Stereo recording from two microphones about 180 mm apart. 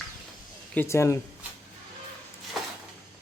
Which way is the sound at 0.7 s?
15° left (ahead or behind).